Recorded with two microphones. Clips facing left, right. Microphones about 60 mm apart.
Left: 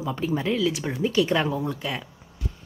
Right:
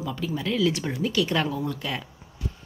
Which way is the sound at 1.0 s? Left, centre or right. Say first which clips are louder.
Left 3 dB; centre.